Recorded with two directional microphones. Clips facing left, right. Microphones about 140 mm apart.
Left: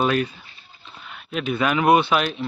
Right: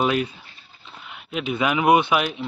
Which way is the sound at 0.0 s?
15° right (ahead or behind).